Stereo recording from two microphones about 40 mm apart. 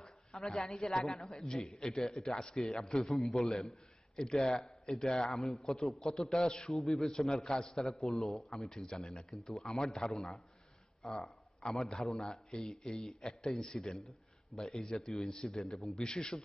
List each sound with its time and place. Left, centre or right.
0.4 s a man's voice: centre
6.6 s a man's voice: centre
8.6 s a man's voice: centre
10.1 s a man's voice: centre
11.0 s a sound: centre
12.1 s a man's voice: centre
13.6 s a man's voice: centre
14.5 s a man's voice: centre